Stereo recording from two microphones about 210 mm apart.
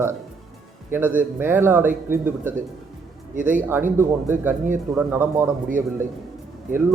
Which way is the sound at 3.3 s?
40° right (ahead or behind).